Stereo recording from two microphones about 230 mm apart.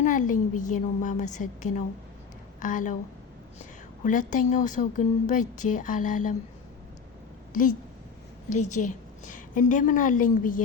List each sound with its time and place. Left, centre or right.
0.0 s a woman's voice: left
4.0 s a woman's voice: left
7.5 s a woman's voice: left